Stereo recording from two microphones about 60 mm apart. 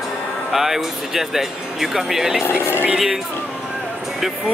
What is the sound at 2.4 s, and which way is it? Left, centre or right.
Speech, left.